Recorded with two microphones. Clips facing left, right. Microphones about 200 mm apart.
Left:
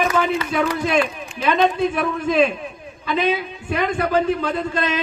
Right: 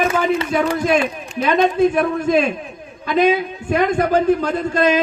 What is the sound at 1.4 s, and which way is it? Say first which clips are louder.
A man's voice: right 3 dB; 45° right (ahead or behind).